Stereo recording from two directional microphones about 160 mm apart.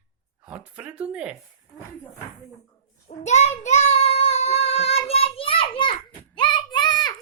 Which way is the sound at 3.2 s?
45° left (ahead or behind).